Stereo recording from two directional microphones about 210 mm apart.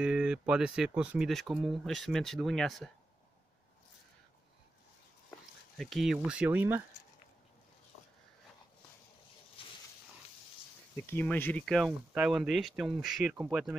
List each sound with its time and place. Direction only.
0.0 s speech: 5° right (ahead or behind)
5.8 s speech: centre (ahead or behind)
9.6 s pig: 25° left (ahead or behind)
11.1 s speech: 10° left (ahead or behind)